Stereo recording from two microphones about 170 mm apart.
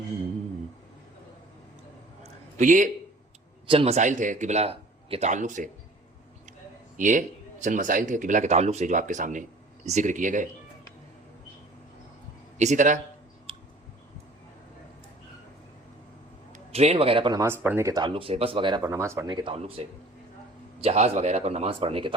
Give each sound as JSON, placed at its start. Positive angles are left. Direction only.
{"t": 2.2, "sound": "a sound", "side_deg": -50}
{"t": 3.7, "sound": "speech", "side_deg": -35}
{"t": 6.9, "sound": "speech", "side_deg": -50}
{"t": 12.5, "sound": "a man's voice", "side_deg": -45}
{"t": 13.5, "sound": "clicking", "side_deg": -35}
{"t": 16.5, "sound": "a man's voice", "side_deg": -40}
{"t": 17.4, "sound": "speech", "side_deg": -15}
{"t": 18.8, "sound": "speech", "side_deg": -15}
{"t": 19.3, "sound": "speech", "side_deg": -30}